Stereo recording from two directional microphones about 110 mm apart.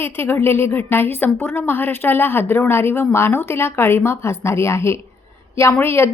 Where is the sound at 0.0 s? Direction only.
20° left (ahead or behind).